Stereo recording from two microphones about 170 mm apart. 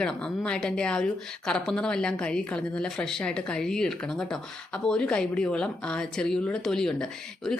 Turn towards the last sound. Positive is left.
turn(degrees=5)  # may be behind; listen again after turning